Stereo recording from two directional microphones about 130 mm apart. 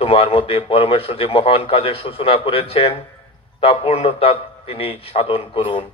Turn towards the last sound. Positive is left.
turn(degrees=45)  # may be behind; listen again after turning